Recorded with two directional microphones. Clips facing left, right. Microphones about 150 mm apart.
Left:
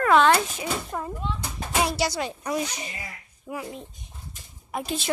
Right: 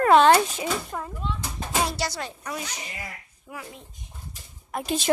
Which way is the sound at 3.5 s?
15° left (ahead or behind).